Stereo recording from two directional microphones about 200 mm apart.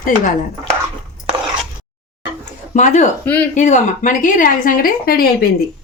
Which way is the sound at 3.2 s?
10° left (ahead or behind).